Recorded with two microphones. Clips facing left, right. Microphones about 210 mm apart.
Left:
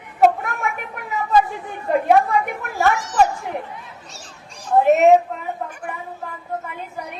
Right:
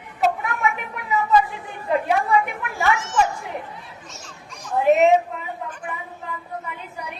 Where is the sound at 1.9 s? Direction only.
45° left (ahead or behind).